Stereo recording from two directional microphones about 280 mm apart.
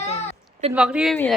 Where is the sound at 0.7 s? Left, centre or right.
Centre.